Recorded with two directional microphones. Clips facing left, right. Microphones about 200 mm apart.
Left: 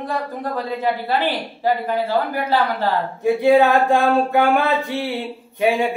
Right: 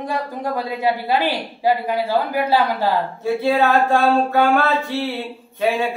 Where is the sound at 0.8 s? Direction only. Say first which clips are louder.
Right 2 dB; 15° right (ahead or behind).